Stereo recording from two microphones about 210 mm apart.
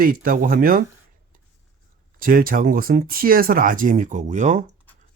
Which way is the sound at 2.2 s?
45° right (ahead or behind).